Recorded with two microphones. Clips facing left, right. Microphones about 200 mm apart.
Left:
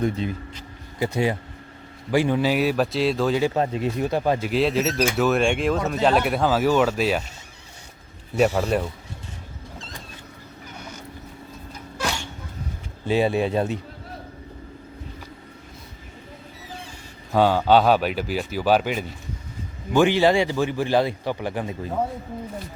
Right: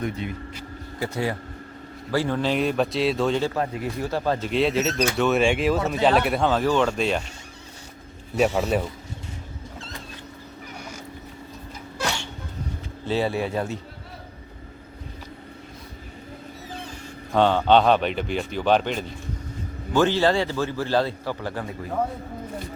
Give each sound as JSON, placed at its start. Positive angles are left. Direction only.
{"t": 0.0, "sound": "speech", "side_deg": 30}
{"t": 0.9, "sound": "speech", "side_deg": 20}
{"t": 3.4, "sound": "a man's voice", "side_deg": 25}
{"t": 8.4, "sound": "speech", "side_deg": 0}
{"t": 13.1, "sound": "speech", "side_deg": 15}
{"t": 17.3, "sound": "a man's voice", "side_deg": 5}